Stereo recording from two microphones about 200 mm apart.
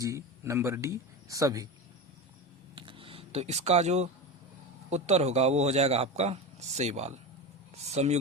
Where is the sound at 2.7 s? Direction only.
25° right (ahead or behind).